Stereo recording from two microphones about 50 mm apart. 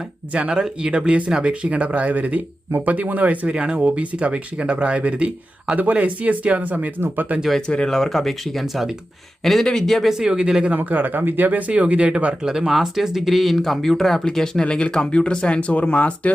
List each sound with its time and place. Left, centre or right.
0.3 s speech: right
3.4 s speech: centre
7.7 s speech: centre
10.1 s speech: centre
10.7 s speech: right
11.7 s speech: right
12.5 s speech: centre; by 16.3 s left